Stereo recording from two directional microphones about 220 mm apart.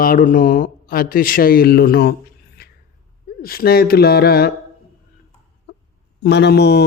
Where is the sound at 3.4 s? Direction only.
45° left (ahead or behind).